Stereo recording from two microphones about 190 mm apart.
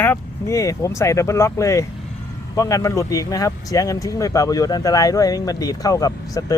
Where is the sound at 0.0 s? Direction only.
10° left (ahead or behind).